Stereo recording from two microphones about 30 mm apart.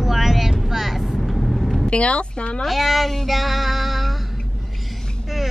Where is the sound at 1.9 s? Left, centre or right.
Left.